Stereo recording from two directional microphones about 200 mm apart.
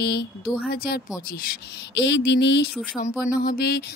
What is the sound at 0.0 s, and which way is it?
Speech, 55° left (ahead or behind).